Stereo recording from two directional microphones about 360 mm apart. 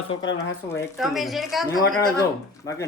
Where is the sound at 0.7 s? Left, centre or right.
Centre.